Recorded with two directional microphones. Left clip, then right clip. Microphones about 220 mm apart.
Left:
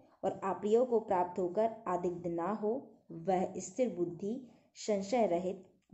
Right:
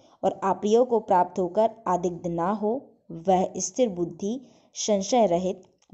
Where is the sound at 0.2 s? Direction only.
45° right (ahead or behind).